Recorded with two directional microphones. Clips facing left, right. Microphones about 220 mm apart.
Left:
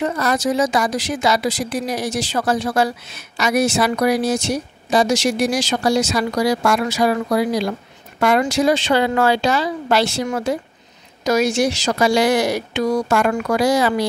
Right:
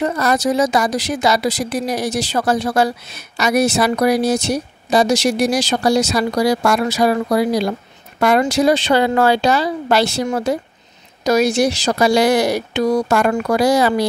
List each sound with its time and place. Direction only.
0.0 s a woman's voice: 40° right (ahead or behind)